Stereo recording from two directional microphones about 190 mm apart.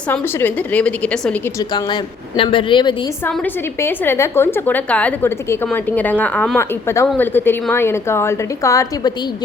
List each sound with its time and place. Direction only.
0.1 s a woman's voice: 10° left (ahead or behind)
1.5 s speech: 20° left (ahead or behind)
3.2 s a woman's voice: 10° left (ahead or behind)